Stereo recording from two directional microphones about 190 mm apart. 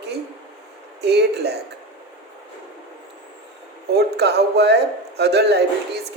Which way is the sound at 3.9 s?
60° right (ahead or behind).